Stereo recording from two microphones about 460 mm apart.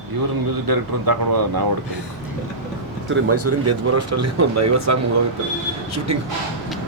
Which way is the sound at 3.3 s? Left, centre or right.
Right.